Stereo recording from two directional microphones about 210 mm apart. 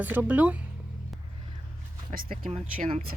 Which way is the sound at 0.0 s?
10° right (ahead or behind).